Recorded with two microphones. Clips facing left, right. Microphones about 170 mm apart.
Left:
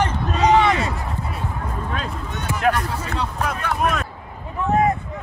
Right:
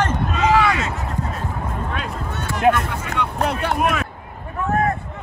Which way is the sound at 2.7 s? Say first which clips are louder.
Right 1 dB; 35° left (ahead or behind).